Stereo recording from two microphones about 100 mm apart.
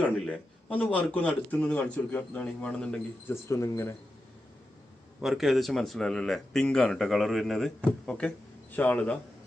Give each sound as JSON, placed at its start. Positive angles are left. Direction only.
{"t": 0.0, "sound": "a man's voice", "side_deg": 15}
{"t": 3.2, "sound": "speech", "side_deg": 25}
{"t": 5.2, "sound": "a man's voice", "side_deg": 0}